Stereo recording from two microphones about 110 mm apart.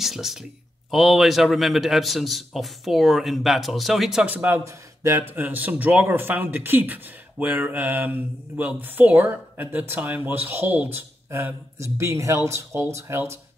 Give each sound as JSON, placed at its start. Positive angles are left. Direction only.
{"t": 0.0, "sound": "a man's voice", "side_deg": 0}